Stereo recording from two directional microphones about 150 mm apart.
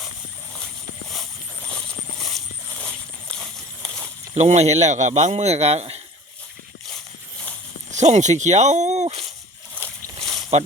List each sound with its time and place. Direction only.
1.1 s a sound: 5° left (ahead or behind)
4.4 s speech: 45° right (ahead or behind)
7.9 s speech: 50° right (ahead or behind)